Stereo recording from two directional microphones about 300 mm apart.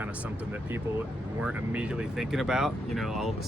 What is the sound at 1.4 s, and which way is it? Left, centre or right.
Speech, centre.